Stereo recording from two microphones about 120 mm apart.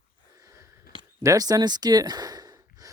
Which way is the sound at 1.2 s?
30° right (ahead or behind).